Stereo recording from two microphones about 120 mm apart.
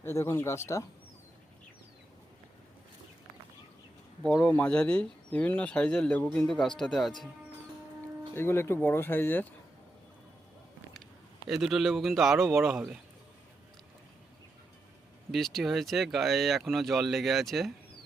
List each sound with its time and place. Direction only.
0.0 s speech: 20° left (ahead or behind)
4.4 s speech: 15° left (ahead or behind)
8.3 s speech: 20° left (ahead or behind)
11.4 s speech: centre (ahead or behind)
15.3 s speech: centre (ahead or behind)